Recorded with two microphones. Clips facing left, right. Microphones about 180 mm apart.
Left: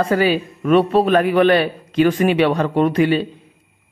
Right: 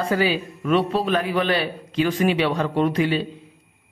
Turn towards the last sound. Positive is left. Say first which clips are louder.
# left 5 dB
turn(degrees=55)  # may be behind; listen again after turning